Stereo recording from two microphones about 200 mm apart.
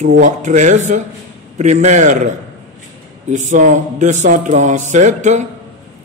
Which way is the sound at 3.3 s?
40° right (ahead or behind).